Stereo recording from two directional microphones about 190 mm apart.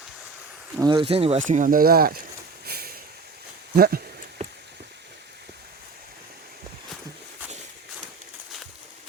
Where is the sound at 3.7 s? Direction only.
55° right (ahead or behind).